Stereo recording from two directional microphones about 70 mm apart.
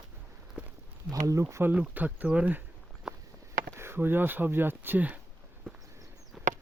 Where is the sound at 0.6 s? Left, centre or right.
Centre.